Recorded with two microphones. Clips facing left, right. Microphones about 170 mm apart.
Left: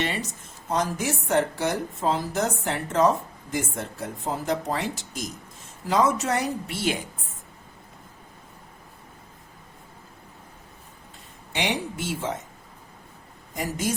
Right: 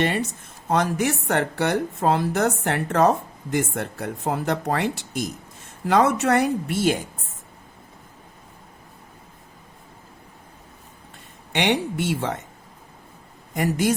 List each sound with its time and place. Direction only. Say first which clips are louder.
0.0 s a woman's voice: right 6 dB; 55° right (ahead or behind)
11.5 s a woman's voice: right 6 dB; 65° right (ahead or behind)
13.5 s speech: right 6 dB; 65° right (ahead or behind)